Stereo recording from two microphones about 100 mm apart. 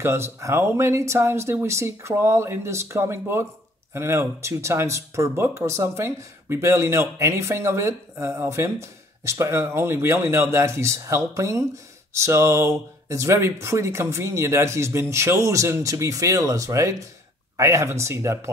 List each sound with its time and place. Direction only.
0.0 s speech: 25° right (ahead or behind)